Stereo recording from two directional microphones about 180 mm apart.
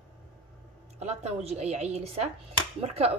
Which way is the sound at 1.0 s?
35° right (ahead or behind).